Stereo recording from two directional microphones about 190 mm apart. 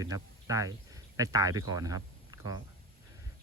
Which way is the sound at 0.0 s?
20° right (ahead or behind).